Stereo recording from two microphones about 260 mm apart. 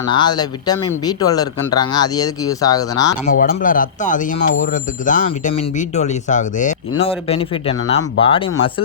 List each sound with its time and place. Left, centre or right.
0.1 s speech: centre
3.3 s speech: left